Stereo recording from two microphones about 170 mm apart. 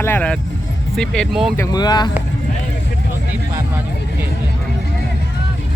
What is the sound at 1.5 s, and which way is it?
Speech, 25° left (ahead or behind).